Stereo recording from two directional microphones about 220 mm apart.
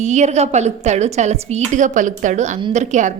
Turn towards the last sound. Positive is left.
turn(degrees=-35)  # may be behind; listen again after turning